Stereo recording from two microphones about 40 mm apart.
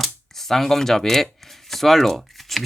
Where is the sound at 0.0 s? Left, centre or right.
Centre.